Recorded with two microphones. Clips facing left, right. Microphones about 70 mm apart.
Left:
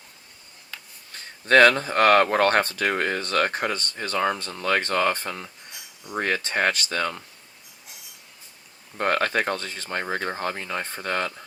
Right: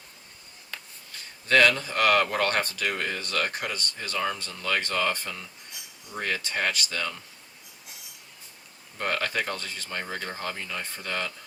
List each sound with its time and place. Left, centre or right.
1.1 s speech: left
9.0 s speech: left